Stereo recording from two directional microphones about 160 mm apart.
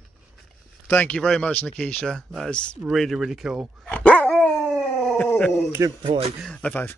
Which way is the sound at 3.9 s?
5° left (ahead or behind).